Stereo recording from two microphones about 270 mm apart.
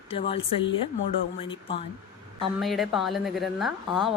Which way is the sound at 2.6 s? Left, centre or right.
Centre.